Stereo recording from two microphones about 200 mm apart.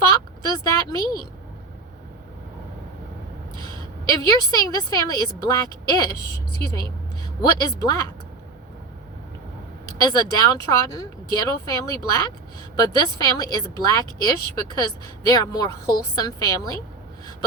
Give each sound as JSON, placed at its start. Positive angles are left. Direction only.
{"t": 0.4, "sound": "speech", "side_deg": 20}
{"t": 4.1, "sound": "speech", "side_deg": 20}
{"t": 7.6, "sound": "speech", "side_deg": 20}
{"t": 10.0, "sound": "speech", "side_deg": 20}